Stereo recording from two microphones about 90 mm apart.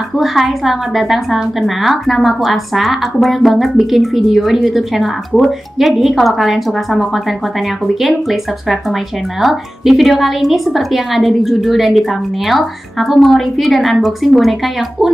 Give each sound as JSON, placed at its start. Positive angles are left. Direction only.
{"t": 0.1, "sound": "a woman's voice", "side_deg": 0}